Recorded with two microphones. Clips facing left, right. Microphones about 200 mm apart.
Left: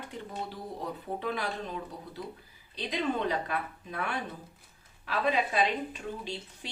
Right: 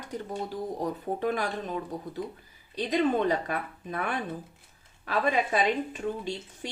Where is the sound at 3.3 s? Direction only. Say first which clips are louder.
Right 3 dB; 45° right (ahead or behind).